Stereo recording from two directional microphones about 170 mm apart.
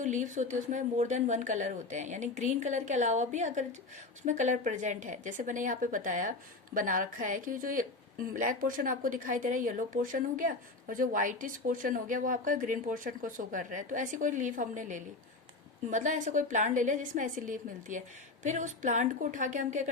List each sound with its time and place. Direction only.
0.0 s a woman's voice: 45° right (ahead or behind)